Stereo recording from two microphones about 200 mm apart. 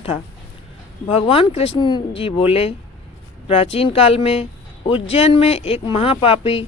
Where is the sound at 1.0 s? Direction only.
25° left (ahead or behind).